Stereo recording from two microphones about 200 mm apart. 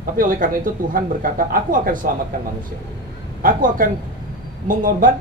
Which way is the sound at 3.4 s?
45° right (ahead or behind).